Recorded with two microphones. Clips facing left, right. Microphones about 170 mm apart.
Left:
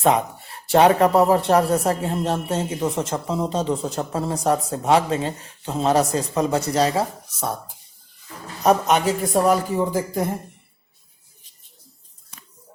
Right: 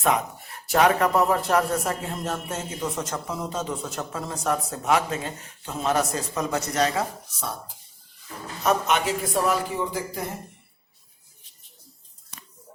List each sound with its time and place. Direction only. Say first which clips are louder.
0.0 s speech: left 5 dB; 30° left (ahead or behind)
8.6 s speech: left 5 dB; 40° left (ahead or behind)